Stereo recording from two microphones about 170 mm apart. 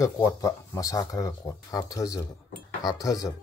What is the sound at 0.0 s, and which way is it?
Speech, 15° left (ahead or behind).